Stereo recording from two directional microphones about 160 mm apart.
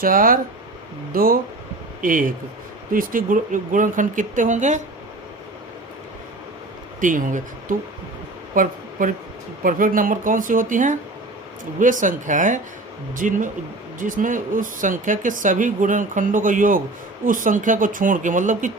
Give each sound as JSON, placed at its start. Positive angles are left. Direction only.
{"t": 0.0, "sound": "speech", "side_deg": -60}
{"t": 7.0, "sound": "speech", "side_deg": -55}